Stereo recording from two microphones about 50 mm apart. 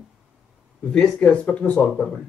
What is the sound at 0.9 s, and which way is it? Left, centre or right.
Speech, centre.